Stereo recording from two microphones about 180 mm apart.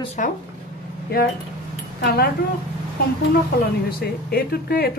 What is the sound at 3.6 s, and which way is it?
Speech, 60° left (ahead or behind).